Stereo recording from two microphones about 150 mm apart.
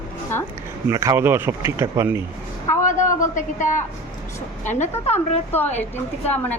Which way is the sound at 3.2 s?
55° left (ahead or behind).